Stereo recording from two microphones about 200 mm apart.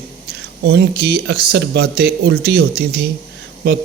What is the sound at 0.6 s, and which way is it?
Speech, 55° right (ahead or behind).